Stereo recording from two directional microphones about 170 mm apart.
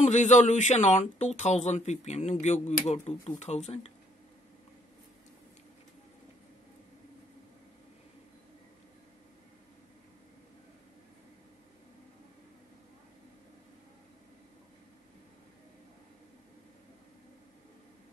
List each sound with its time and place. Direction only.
0.0 s speech: 45° left (ahead or behind)